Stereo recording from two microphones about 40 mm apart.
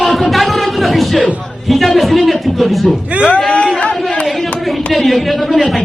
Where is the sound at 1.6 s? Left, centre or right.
Centre.